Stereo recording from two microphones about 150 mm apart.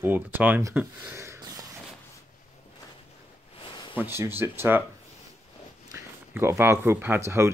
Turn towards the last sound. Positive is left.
turn(degrees=-15)  # may be behind; listen again after turning